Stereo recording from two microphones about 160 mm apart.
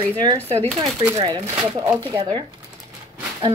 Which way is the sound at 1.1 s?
30° right (ahead or behind).